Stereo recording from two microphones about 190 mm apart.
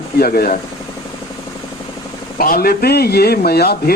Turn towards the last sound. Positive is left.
turn(degrees=55)  # may be behind; listen again after turning